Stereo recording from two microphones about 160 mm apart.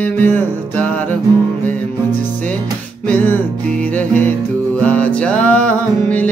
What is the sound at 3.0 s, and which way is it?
Music, 10° left (ahead or behind).